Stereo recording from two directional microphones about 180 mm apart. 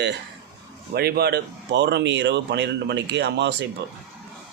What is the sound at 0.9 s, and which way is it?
Speech, 60° right (ahead or behind).